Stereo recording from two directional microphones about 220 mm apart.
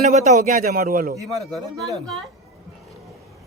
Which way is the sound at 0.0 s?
30° right (ahead or behind).